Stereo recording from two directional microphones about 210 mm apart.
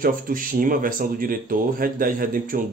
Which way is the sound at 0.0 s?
40° right (ahead or behind).